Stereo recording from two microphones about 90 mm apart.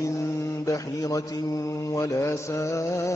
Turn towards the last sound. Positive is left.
turn(degrees=35)  # may be behind; listen again after turning